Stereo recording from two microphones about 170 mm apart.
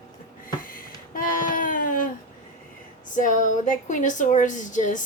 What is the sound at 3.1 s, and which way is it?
Speech, 50° left (ahead or behind).